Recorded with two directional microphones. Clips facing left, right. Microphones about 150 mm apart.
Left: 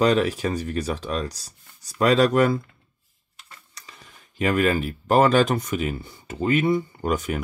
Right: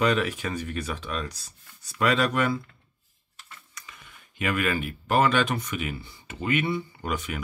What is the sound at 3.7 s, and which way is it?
Speech, 35° left (ahead or behind).